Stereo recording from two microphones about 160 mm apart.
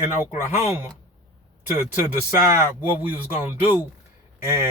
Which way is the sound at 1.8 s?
15° right (ahead or behind).